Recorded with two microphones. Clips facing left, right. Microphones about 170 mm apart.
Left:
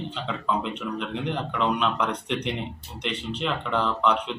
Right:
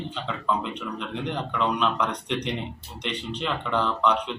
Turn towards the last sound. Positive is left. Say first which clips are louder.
# even
turn(degrees=5)  # may be behind; listen again after turning